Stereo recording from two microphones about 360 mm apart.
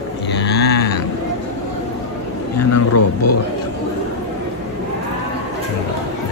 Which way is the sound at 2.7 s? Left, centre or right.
Left.